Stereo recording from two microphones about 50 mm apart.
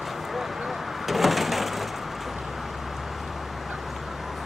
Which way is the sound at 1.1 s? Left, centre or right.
Centre.